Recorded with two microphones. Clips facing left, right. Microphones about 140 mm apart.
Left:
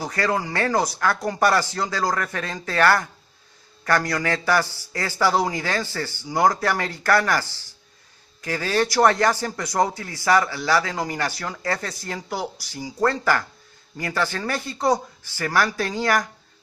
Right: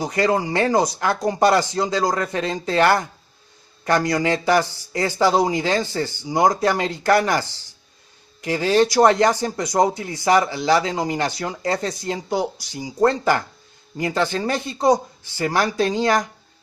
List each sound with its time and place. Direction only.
0.0 s speech: 20° right (ahead or behind)